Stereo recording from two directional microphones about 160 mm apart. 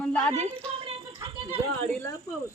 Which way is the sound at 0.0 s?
10° left (ahead or behind).